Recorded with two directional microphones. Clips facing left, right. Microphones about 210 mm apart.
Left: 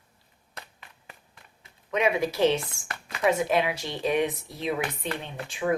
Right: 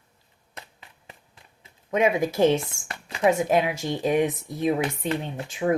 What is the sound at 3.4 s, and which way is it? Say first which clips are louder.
Speech: right 3 dB; 45° right (ahead or behind).